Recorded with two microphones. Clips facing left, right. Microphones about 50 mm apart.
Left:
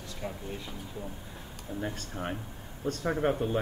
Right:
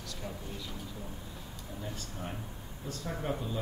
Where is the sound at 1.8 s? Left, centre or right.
Left.